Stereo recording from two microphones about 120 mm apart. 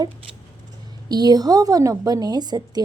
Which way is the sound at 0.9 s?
35° right (ahead or behind).